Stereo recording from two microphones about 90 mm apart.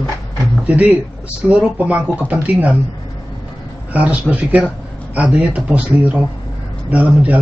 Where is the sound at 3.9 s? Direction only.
15° right (ahead or behind).